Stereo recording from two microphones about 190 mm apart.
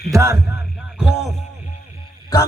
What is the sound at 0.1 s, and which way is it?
Speech, 15° right (ahead or behind).